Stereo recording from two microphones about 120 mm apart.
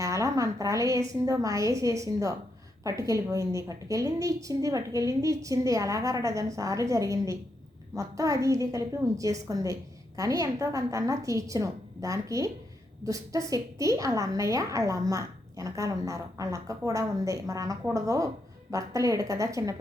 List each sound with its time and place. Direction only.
0.0 s a woman's voice: 25° right (ahead or behind)